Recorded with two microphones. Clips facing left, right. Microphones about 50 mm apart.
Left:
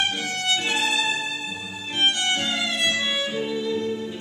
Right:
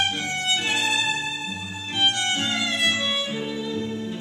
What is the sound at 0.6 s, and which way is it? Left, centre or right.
Violin, centre.